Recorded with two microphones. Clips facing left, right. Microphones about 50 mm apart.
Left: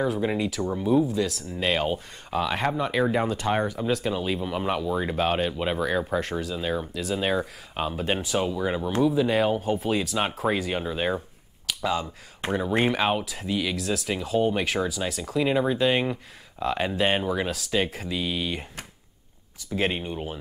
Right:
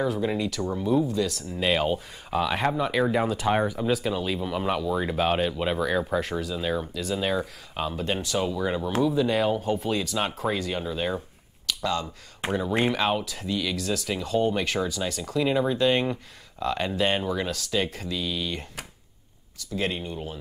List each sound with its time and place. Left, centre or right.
0.0 s speech: centre
7.2 s speech: centre
11.1 s finger snapping: centre
12.5 s speech: centre
18.1 s speech: left
19.7 s speech: left